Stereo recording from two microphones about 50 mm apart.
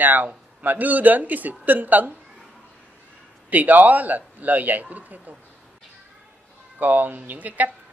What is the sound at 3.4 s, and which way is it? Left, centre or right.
Speech, right.